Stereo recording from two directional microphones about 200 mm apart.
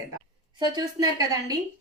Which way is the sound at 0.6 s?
20° right (ahead or behind).